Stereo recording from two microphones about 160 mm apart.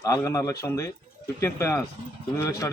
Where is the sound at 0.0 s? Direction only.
20° left (ahead or behind).